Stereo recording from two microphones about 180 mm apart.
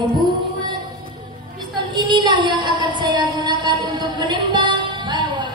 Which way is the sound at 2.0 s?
25° right (ahead or behind).